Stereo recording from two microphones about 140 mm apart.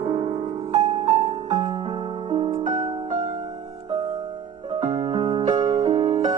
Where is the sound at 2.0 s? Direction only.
55° right (ahead or behind).